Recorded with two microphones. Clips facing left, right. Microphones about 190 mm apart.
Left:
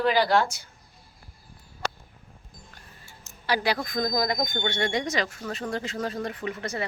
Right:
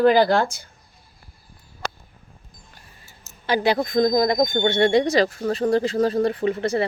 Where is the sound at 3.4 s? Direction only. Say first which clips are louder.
Right 6 dB; 25° right (ahead or behind).